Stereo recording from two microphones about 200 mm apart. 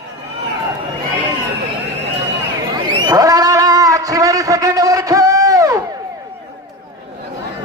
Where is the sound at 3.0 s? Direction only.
15° right (ahead or behind).